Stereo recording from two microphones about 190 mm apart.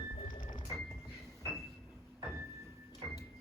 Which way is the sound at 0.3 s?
45° left (ahead or behind).